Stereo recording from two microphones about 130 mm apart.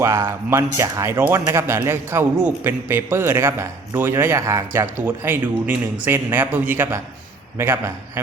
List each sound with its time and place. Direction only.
0.0 s speech: 20° right (ahead or behind)